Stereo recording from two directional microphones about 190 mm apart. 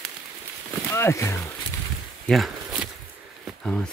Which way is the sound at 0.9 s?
15° left (ahead or behind).